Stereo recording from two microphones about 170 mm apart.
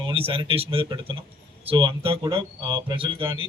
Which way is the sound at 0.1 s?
35° right (ahead or behind).